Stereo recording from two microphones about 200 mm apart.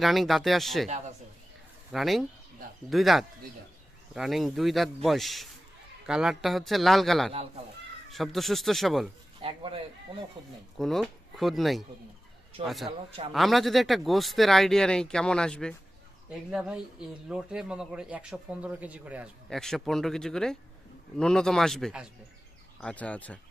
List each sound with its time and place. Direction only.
0.0 s speech: centre (ahead or behind)
1.9 s speech: centre (ahead or behind)
9.4 s speech: 25° right (ahead or behind)
10.8 s speech: centre (ahead or behind)